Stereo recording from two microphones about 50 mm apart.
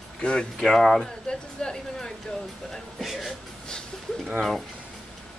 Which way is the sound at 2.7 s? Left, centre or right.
Centre.